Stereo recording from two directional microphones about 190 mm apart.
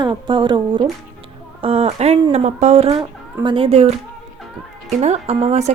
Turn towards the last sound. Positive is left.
turn(degrees=-35)  # may be behind; listen again after turning